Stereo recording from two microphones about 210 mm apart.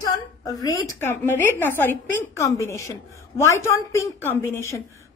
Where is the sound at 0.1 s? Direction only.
15° left (ahead or behind).